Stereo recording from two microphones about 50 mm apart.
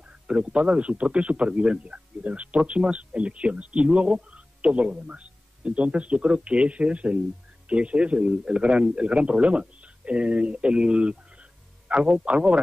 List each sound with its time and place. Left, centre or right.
0.3 s speech: right